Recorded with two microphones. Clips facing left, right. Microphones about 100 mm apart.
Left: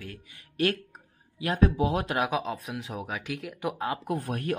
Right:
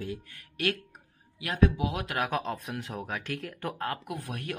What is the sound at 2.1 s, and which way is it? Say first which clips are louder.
Speech: left 2 dB; 10° left (ahead or behind).